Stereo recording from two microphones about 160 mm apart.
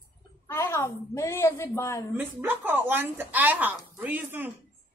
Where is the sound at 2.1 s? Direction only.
15° right (ahead or behind).